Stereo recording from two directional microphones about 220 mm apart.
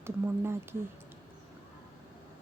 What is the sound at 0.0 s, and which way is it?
Speech, 10° right (ahead or behind).